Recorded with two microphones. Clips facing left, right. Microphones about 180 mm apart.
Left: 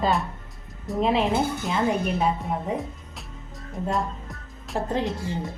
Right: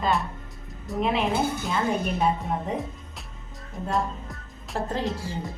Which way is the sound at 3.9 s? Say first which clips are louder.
Right 4 dB; centre (ahead or behind).